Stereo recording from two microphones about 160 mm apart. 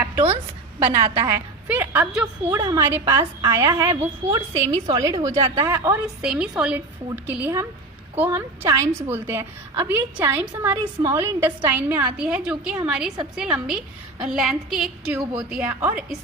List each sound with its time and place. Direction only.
0.8 s a woman's voice: 15° right (ahead or behind)
6.2 s a woman's voice: 5° right (ahead or behind)